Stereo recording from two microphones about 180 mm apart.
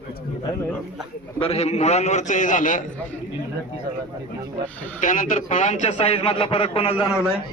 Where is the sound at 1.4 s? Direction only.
35° left (ahead or behind).